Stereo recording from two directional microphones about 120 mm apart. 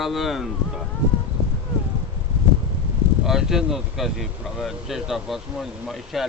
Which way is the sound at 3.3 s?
5° right (ahead or behind).